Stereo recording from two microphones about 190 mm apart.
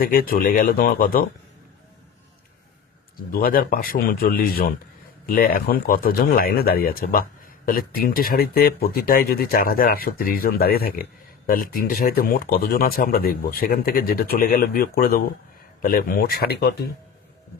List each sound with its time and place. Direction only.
0.0 s speech: 50° left (ahead or behind)
3.3 s speech: 50° left (ahead or behind)